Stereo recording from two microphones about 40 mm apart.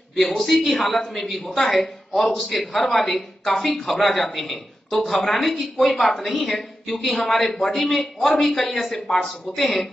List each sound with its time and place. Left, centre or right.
0.1 s speech: centre
1.8 s speech: centre
2.3 s speech: centre